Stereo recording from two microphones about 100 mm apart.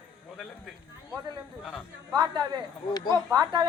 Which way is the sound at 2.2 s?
50° right (ahead or behind).